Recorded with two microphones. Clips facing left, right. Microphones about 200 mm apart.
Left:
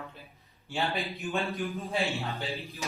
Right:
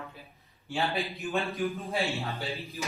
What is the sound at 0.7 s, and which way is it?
A man's voice, centre (ahead or behind).